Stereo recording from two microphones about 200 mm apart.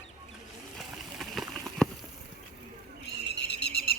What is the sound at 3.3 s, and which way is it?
Owl, 55° left (ahead or behind).